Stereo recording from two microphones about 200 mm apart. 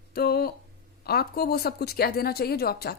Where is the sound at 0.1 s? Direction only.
50° left (ahead or behind).